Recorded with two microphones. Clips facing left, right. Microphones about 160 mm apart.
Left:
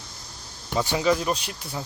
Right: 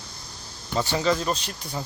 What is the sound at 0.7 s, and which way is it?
Speech, 10° left (ahead or behind).